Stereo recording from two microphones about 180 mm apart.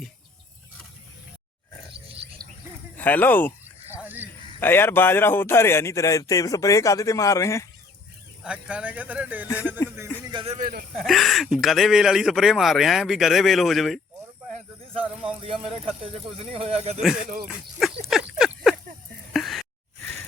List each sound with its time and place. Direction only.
3.0 s a man's voice: 10° left (ahead or behind)
4.0 s a sound: 10° right (ahead or behind)
4.6 s a man's voice: 10° left (ahead or behind)
8.4 s speech: 5° right (ahead or behind)
9.8 s a sound: 15° left (ahead or behind)
10.3 s speech: 35° right (ahead or behind)
10.6 s speech: 50° right (ahead or behind)
11.0 s speech: centre (ahead or behind)
15.0 s speech: 5° right (ahead or behind)
15.4 s speech: 30° right (ahead or behind)
17.4 s speech: centre (ahead or behind)
18.1 s a sound: 5° right (ahead or behind)